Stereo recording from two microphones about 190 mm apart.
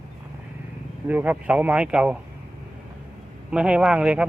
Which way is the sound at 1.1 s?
10° right (ahead or behind).